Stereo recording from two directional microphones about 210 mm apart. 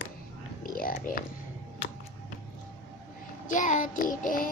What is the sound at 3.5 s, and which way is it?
Child singing, 35° left (ahead or behind).